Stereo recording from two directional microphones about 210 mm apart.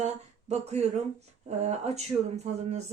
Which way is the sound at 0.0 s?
30° right (ahead or behind).